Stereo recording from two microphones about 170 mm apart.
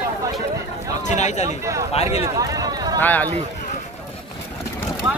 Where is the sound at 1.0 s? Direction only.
45° left (ahead or behind).